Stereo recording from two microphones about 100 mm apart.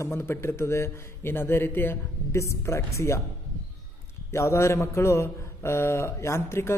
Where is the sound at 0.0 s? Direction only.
25° left (ahead or behind).